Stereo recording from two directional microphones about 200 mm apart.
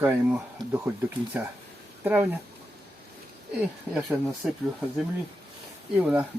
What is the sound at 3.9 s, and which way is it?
Speech, centre (ahead or behind).